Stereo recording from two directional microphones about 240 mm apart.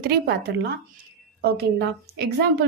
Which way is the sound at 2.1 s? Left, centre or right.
Right.